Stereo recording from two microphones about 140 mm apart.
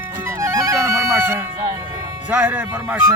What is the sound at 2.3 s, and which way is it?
Speech, 10° right (ahead or behind).